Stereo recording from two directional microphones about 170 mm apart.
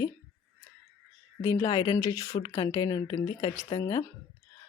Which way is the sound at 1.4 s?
15° left (ahead or behind).